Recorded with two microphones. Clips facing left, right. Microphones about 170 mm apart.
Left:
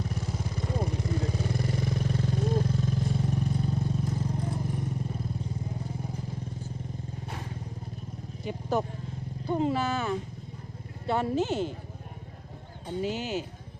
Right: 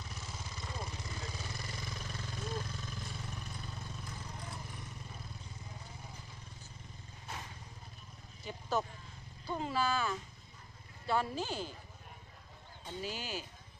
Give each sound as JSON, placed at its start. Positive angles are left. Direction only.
{"t": 0.0, "sound": "vehicle", "side_deg": 55}
{"t": 9.5, "sound": "speech", "side_deg": 25}
{"t": 13.0, "sound": "speech", "side_deg": 20}